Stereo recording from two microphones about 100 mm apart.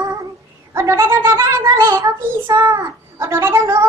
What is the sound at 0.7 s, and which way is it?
A child's voice, 30° right (ahead or behind).